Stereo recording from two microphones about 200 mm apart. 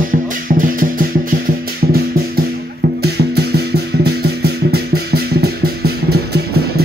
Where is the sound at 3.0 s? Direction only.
55° right (ahead or behind).